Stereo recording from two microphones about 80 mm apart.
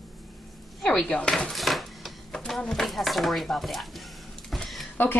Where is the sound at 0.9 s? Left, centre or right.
Centre.